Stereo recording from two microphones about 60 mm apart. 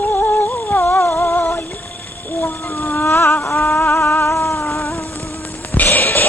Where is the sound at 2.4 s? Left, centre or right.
Left.